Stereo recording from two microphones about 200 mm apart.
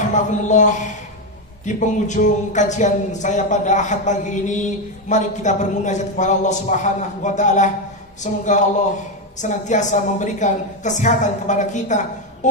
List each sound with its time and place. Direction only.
0.0 s speech: 35° left (ahead or behind)